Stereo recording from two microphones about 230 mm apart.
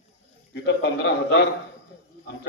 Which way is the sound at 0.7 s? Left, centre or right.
Left.